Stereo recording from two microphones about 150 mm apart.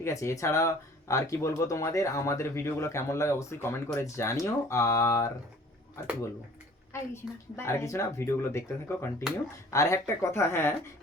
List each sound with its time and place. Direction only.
0.0 s speech: 20° left (ahead or behind)
6.9 s a woman's voice: 15° left (ahead or behind)